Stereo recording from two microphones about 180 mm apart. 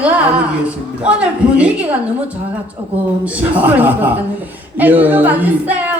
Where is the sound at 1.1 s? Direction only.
5° right (ahead or behind).